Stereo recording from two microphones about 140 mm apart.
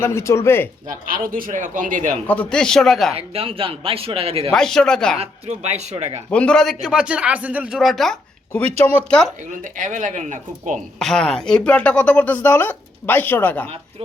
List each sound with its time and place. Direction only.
0.0 s speech: 20° left (ahead or behind)
0.9 s speech: 85° right; by 2.1 s 65° right (ahead or behind)
2.2 s speech: 10° left (ahead or behind)
3.2 s a man's voice: 45° right (ahead or behind)
4.5 s speech: 5° left (ahead or behind)
5.2 s a man's voice: 50° right (ahead or behind)
6.3 s speech: 5° left (ahead or behind)
6.8 s speech: 5° right (ahead or behind)
9.6 s speech: 70° right (ahead or behind)
10.8 s speech: 5° left (ahead or behind)